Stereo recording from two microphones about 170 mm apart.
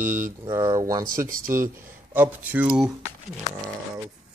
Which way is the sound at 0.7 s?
20° right (ahead or behind).